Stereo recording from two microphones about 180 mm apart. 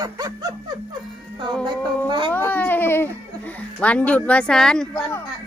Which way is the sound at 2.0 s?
25° right (ahead or behind).